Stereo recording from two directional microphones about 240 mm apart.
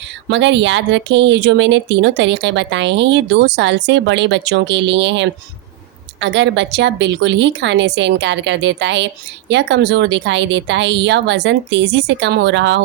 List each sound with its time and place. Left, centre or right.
0.3 s speech: right